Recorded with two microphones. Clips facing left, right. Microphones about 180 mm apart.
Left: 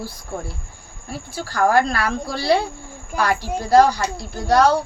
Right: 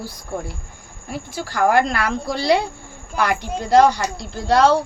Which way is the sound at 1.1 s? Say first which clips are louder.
Right 2 dB; 20° right (ahead or behind).